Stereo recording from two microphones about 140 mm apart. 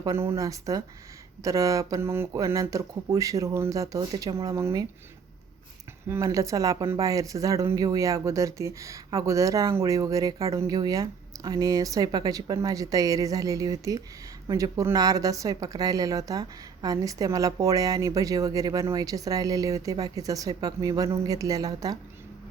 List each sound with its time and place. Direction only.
0.0 s speech: 20° right (ahead or behind)
6.1 s speech: 20° right (ahead or behind)